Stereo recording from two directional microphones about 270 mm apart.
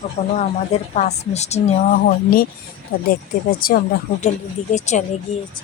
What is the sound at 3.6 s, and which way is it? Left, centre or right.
Speech, left.